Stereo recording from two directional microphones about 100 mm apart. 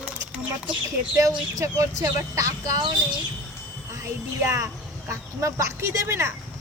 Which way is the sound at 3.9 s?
30° right (ahead or behind).